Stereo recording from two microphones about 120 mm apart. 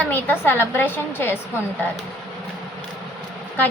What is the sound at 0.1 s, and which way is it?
A woman's voice, 15° left (ahead or behind).